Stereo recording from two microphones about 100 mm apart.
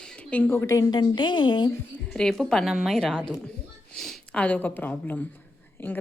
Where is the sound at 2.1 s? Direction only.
5° left (ahead or behind).